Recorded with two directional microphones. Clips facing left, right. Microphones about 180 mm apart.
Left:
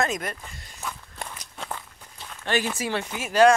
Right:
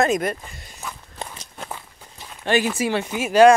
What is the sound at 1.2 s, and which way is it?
Walk, 30° right (ahead or behind).